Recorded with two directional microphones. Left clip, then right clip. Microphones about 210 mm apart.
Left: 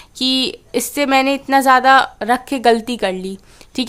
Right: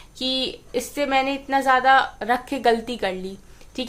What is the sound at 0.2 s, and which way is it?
A woman's voice, 50° left (ahead or behind).